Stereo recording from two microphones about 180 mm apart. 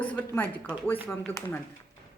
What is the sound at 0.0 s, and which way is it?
A man's voice, 10° left (ahead or behind).